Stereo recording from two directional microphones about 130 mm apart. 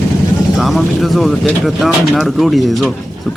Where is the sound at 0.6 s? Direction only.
Centre (ahead or behind).